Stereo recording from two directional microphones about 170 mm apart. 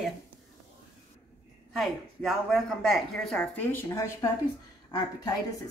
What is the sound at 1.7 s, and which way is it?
A woman's voice, centre (ahead or behind).